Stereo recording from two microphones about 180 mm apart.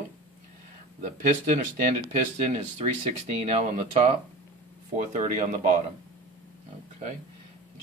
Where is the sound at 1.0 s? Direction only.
45° right (ahead or behind).